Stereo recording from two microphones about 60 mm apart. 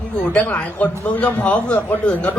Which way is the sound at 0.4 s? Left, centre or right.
Left.